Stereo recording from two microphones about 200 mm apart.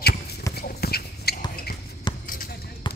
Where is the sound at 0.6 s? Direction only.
50° left (ahead or behind).